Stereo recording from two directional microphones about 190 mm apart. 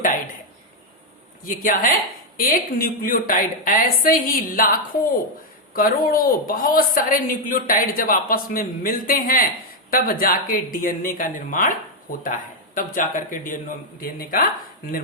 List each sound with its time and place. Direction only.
1.5 s a woman's voice: 45° left (ahead or behind)